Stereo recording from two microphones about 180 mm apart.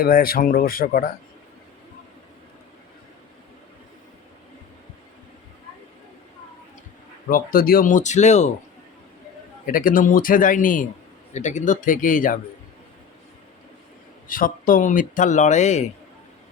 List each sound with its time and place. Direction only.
0.0 s speech: 55° left (ahead or behind)
7.3 s speech: 55° left (ahead or behind)
9.7 s speech: 50° left (ahead or behind)
14.3 s speech: 50° left (ahead or behind)